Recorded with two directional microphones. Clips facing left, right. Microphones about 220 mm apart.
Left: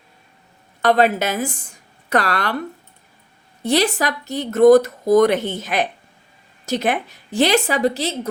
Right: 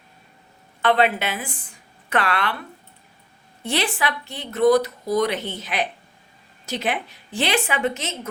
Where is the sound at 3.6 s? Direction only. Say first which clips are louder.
Left 6 dB; 40° left (ahead or behind).